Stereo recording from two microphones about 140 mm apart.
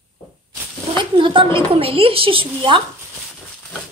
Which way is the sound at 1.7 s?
45° right (ahead or behind).